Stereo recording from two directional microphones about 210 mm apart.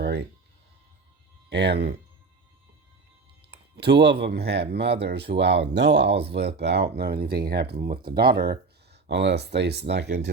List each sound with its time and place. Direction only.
0.0 s music: 50° right (ahead or behind)
1.5 s speech: 55° right (ahead or behind)
3.8 s speech: 55° right (ahead or behind)